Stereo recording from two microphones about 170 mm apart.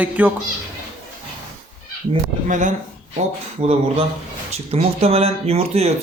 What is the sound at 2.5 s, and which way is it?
Speech, 50° right (ahead or behind).